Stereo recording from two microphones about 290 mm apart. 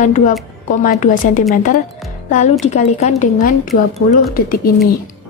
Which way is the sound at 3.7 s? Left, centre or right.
Centre.